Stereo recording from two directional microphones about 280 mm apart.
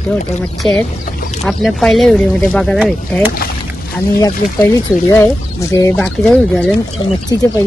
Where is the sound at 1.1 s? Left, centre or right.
Left.